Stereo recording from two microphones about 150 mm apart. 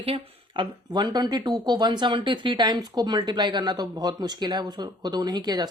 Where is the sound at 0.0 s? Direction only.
35° right (ahead or behind).